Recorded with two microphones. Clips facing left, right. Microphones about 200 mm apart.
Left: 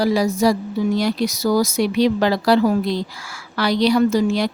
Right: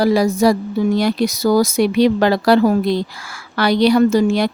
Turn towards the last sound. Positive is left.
turn(degrees=-60)  # may be behind; listen again after turning